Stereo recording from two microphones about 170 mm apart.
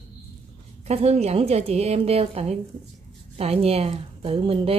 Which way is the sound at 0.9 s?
40° right (ahead or behind).